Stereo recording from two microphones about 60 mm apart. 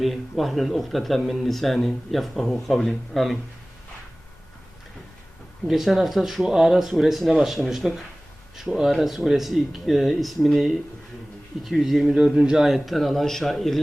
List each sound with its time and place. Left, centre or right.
0.0 s speech: centre
5.6 s speech: centre